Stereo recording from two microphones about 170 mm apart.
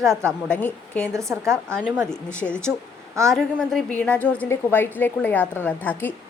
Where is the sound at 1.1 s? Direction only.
15° right (ahead or behind).